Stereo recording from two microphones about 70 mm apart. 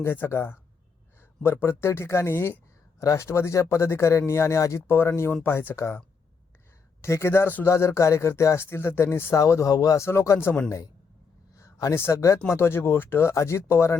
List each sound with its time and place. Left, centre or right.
0.0 s speech: left
3.0 s speech: left
7.0 s speech: left
7.7 s speech: left
9.3 s speech: left
10.0 s speech: left
11.5 s a sound: left
11.9 s speech: left
12.5 s speech: left